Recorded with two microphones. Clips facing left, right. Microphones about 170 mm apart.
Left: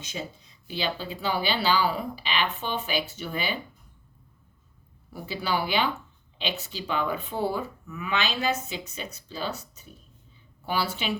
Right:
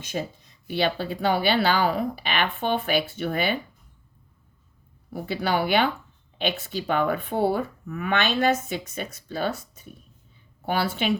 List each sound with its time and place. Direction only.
0.1 s speech: 55° right (ahead or behind)
5.1 s speech: 55° right (ahead or behind)
10.7 s a woman's voice: 55° right (ahead or behind)